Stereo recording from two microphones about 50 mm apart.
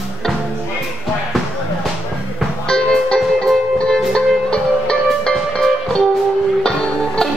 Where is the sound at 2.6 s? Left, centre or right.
Centre.